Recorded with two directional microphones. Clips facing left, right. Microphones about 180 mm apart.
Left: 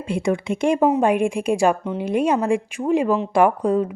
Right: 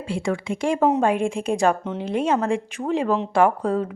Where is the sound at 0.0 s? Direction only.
20° left (ahead or behind).